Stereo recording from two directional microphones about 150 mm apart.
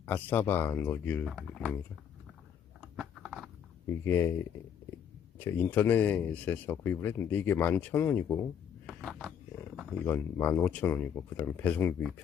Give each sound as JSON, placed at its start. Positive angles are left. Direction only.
{"t": 0.0, "sound": "speech", "side_deg": 10}
{"t": 1.2, "sound": "speech", "side_deg": 0}
{"t": 2.8, "sound": "a sound", "side_deg": -5}
{"t": 3.8, "sound": "speech", "side_deg": 15}
{"t": 5.4, "sound": "speech", "side_deg": 15}
{"t": 8.9, "sound": "a sound", "side_deg": 0}
{"t": 9.9, "sound": "speech", "side_deg": 15}